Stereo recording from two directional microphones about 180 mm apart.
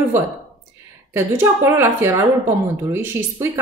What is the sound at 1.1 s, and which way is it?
Speech, 15° right (ahead or behind).